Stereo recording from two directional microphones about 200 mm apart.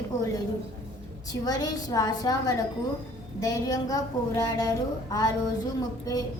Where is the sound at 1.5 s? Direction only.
20° left (ahead or behind).